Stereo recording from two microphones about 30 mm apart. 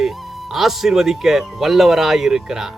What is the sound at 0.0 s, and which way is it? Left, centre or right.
Speech, centre.